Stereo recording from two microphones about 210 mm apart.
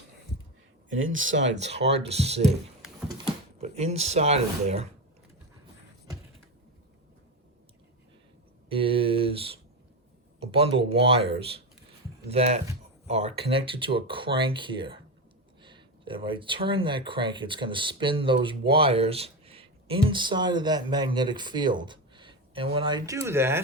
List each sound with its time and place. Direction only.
0.9 s speech: 70° right (ahead or behind)
1.6 s speech: 30° right (ahead or behind)
3.6 s speech: 30° right (ahead or behind)
8.7 s speech: 25° right (ahead or behind)